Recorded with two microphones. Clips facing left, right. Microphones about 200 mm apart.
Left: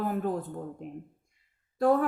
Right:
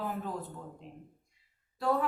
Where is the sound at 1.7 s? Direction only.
50° left (ahead or behind).